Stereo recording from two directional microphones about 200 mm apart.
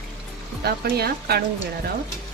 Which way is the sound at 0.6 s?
50° right (ahead or behind).